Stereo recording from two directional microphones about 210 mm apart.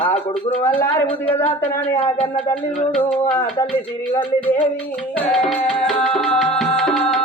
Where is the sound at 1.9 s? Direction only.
25° left (ahead or behind).